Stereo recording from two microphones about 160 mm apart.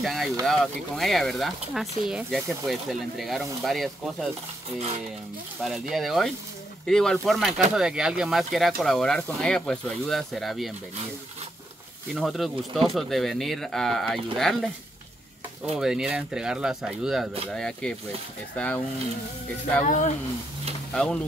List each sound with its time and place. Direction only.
0.0 s speech: centre (ahead or behind)
5.6 s speech: centre (ahead or behind)
12.1 s speech: centre (ahead or behind)
19.8 s speech: 50° left (ahead or behind)
20.9 s speech: 5° left (ahead or behind)